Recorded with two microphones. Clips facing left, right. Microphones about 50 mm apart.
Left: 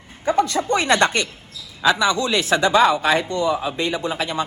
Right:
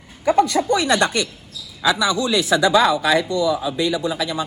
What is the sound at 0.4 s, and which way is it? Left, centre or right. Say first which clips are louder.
A man's voice: right 1 dB; left.